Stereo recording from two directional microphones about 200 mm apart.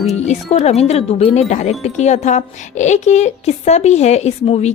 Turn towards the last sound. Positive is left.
turn(degrees=30)  # may be behind; listen again after turning